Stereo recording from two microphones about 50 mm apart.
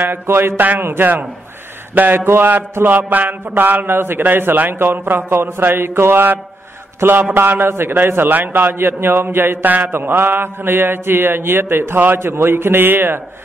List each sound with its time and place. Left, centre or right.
0.0 s a man's voice: right
2.2 s a man's voice: right
9.7 s a man's voice: right